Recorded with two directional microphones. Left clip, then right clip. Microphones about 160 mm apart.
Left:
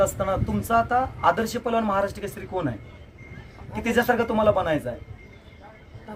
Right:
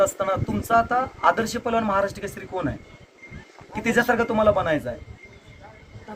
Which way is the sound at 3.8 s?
20° left (ahead or behind).